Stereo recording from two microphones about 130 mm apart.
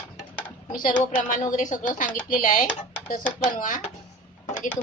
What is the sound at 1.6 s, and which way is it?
A woman's voice, 80° left.